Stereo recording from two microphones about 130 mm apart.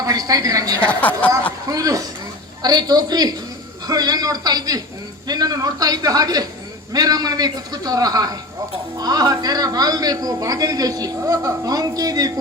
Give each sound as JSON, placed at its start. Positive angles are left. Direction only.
{"t": 0.0, "sound": "a woman's voice", "side_deg": -30}
{"t": 0.9, "sound": "speech", "side_deg": 10}
{"t": 1.6, "sound": "a man's voice", "side_deg": -25}